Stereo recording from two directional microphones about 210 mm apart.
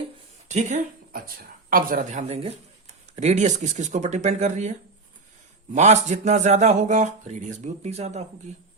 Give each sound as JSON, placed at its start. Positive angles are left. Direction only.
{"t": 0.4, "sound": "speech", "side_deg": -35}